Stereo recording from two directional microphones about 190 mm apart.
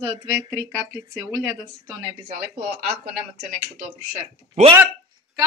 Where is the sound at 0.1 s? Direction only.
15° right (ahead or behind).